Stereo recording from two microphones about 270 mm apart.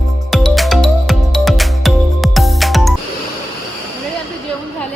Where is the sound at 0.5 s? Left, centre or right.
Centre.